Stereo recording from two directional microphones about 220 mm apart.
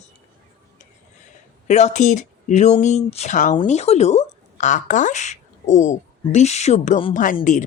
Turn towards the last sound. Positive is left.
turn(degrees=35)  # may be behind; listen again after turning